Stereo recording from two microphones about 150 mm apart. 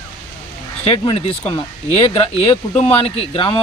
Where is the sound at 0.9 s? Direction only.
40° left (ahead or behind).